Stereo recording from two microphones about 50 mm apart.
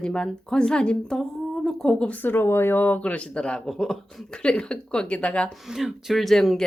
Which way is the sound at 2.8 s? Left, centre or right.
Left.